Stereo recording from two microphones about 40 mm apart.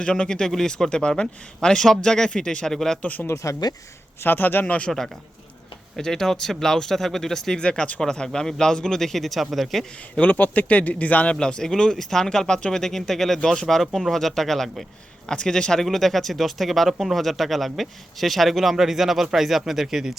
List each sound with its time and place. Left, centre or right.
0.0 s a man's voice: left
4.2 s a man's voice: left
4.9 s speech: centre
10.2 s speech: left
11.3 s speech: centre
15.3 s speech: centre
15.8 s speech: centre